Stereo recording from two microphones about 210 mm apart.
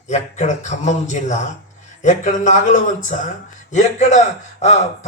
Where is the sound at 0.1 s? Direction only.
35° left (ahead or behind).